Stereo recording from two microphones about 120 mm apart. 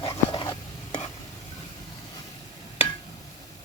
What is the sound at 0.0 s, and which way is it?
Stir, 45° left (ahead or behind).